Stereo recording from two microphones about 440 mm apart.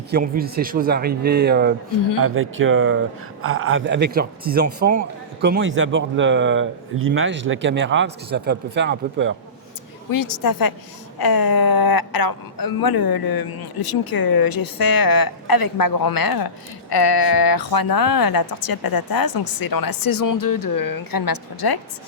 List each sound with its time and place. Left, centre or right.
0.1 s speech: centre
10.1 s speech: left